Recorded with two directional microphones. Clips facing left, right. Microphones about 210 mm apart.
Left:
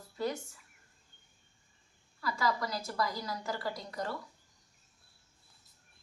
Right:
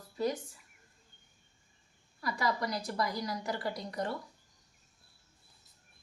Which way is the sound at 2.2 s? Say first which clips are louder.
Even; 20° right (ahead or behind).